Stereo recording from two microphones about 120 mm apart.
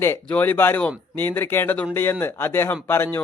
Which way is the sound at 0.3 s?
15° left (ahead or behind).